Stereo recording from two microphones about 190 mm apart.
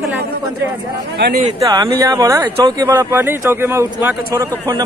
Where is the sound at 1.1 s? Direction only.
60° right (ahead or behind).